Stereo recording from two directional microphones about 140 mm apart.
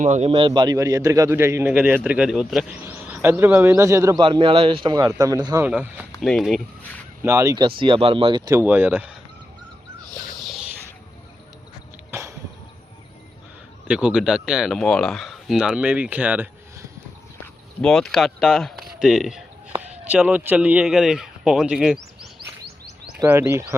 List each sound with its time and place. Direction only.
0.0 s a man's voice: 60° right (ahead or behind)
0.3 s a man's voice: 35° right (ahead or behind); by 4.2 s 20° right (ahead or behind)
4.2 s a man's voice: 35° right (ahead or behind)
5.6 s speech: 10° right (ahead or behind)
6.2 s speech: centre (ahead or behind)
7.2 s a man's voice: 20° right (ahead or behind)
7.8 s a man's voice: 40° right (ahead or behind)
8.4 s speech: 15° right (ahead or behind)
10.3 s a sound: centre (ahead or behind)
12.1 s a sound: 20° right (ahead or behind)
13.8 s speech: 10° right (ahead or behind)
17.4 s speech: 10° left (ahead or behind)
23.2 s speech: 15° right (ahead or behind)